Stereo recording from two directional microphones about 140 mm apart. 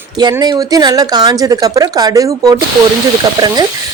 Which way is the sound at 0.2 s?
30° right (ahead or behind).